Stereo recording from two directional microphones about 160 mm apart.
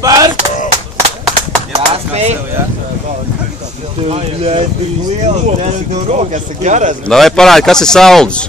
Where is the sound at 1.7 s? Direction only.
45° right (ahead or behind).